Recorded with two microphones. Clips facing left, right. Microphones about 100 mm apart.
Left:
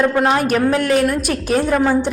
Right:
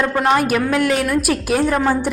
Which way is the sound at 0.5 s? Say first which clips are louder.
Left 1 dB; 35° left (ahead or behind).